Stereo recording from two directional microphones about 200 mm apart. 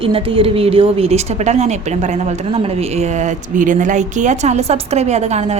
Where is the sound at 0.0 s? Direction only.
25° right (ahead or behind).